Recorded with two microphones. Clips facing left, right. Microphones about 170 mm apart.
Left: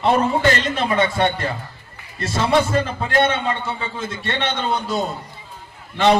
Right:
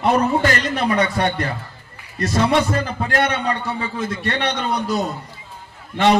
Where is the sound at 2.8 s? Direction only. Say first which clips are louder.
Left 2 dB; 25° left (ahead or behind).